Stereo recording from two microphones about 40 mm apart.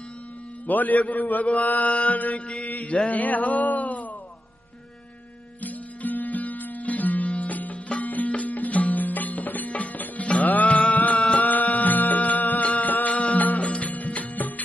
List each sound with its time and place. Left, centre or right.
0.7 s a man's voice: left
2.6 s a sound: left
5.6 s music: left
11.1 s music: left
11.4 s music: left